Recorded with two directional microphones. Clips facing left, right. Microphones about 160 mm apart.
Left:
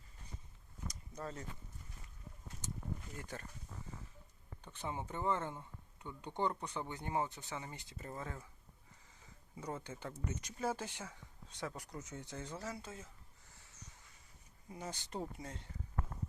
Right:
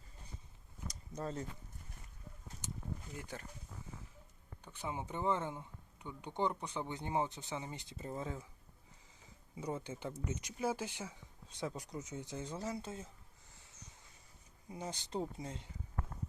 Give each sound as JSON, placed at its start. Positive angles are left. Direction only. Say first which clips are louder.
{"t": 1.1, "sound": "speech", "louder": "right 5 dB", "side_deg": -25}
{"t": 3.2, "sound": "speech", "louder": "right 1 dB", "side_deg": -15}
{"t": 4.6, "sound": "speech", "louder": "right 1 dB", "side_deg": -10}
{"t": 9.6, "sound": "speech", "louder": "right 3 dB", "side_deg": -15}
{"t": 14.7, "sound": "speech", "louder": "right 3 dB", "side_deg": -20}